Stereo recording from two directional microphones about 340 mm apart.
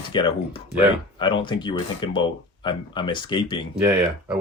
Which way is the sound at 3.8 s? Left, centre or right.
Centre.